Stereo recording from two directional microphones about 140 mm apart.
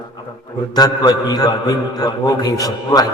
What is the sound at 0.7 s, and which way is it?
A man's voice, 30° left (ahead or behind).